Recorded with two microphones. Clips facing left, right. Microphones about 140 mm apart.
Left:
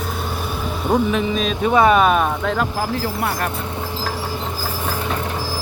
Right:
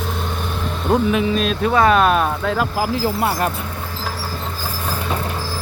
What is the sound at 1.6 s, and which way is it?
Speech, 10° left (ahead or behind).